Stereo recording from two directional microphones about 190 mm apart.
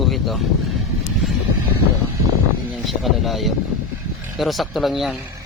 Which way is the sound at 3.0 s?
Centre (ahead or behind).